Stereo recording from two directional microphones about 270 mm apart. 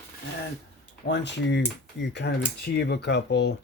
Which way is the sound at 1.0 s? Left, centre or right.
Left.